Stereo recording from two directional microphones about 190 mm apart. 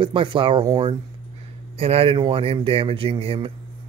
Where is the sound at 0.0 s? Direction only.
25° right (ahead or behind).